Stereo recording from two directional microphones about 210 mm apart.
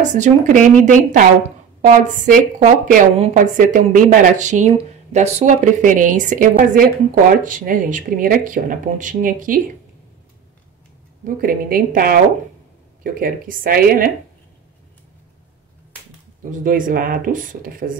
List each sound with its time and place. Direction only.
0.0 s a woman's voice: 35° right (ahead or behind)
11.2 s speech: 40° right (ahead or behind)
16.6 s a woman's voice: 40° right (ahead or behind)